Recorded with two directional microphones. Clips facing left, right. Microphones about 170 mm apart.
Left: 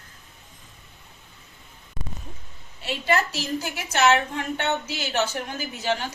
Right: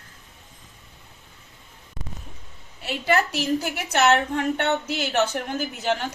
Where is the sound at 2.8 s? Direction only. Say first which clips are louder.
Right 1 dB; 60° right (ahead or behind).